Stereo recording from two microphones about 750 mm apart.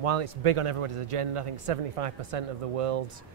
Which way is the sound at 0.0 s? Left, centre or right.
Right.